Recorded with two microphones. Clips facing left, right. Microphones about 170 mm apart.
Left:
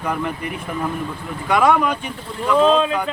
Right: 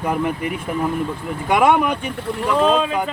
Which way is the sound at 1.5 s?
20° right (ahead or behind).